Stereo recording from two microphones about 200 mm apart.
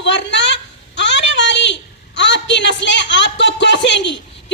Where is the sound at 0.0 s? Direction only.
60° left (ahead or behind).